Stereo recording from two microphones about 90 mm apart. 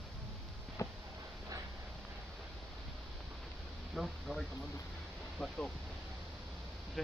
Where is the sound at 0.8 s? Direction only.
35° left (ahead or behind).